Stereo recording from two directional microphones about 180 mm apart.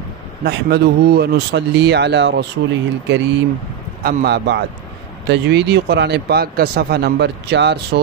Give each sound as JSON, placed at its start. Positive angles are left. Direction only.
{"t": 0.4, "sound": "speech", "side_deg": -65}
{"t": 4.0, "sound": "speech", "side_deg": -60}